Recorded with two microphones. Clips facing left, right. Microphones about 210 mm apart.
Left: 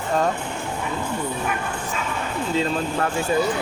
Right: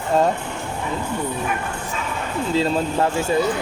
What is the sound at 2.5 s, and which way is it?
Speech, 30° right (ahead or behind).